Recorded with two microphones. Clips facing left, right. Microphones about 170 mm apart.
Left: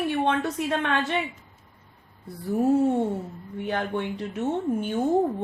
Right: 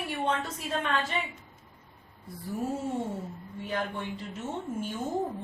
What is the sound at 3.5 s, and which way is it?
A woman's voice, 70° left (ahead or behind).